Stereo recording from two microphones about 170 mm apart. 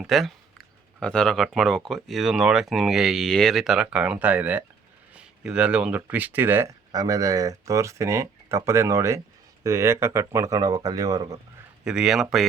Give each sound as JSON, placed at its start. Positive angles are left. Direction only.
{"t": 0.0, "sound": "speech", "side_deg": 0}
{"t": 11.9, "sound": "speech", "side_deg": -5}